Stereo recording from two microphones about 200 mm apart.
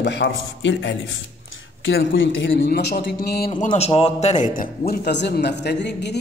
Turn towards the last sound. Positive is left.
turn(degrees=60)  # may be behind; listen again after turning